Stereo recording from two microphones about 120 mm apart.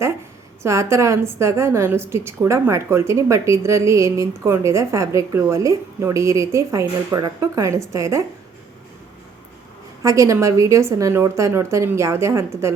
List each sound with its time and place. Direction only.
0.6 s a woman's voice: 25° right (ahead or behind)
10.0 s a woman's voice: 25° right (ahead or behind)